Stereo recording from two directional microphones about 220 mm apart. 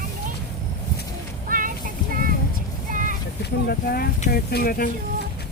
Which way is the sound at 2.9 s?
35° right (ahead or behind).